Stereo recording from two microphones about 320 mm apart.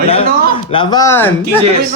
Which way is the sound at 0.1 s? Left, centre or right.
Centre.